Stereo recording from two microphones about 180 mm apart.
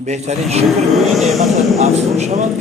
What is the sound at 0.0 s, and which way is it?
Speech, 40° right (ahead or behind).